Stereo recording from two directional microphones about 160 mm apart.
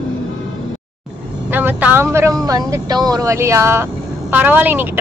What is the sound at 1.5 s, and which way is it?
Speech, 10° right (ahead or behind).